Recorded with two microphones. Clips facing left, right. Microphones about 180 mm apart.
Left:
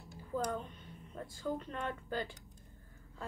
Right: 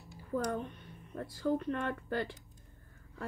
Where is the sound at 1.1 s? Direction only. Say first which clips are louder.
Right 6 dB; 65° right (ahead or behind).